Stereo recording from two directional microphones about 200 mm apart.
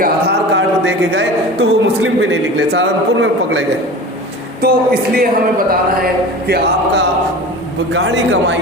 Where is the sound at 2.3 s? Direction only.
60° right (ahead or behind).